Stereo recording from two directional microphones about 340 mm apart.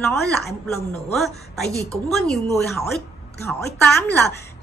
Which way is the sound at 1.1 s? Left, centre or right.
Centre.